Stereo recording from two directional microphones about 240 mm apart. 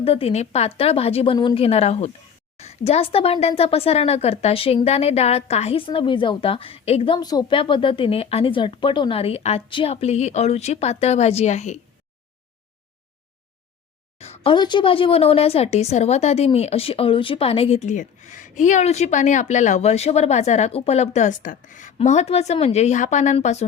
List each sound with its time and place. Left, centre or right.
0.0 s a woman's voice: left
14.2 s a woman's voice: left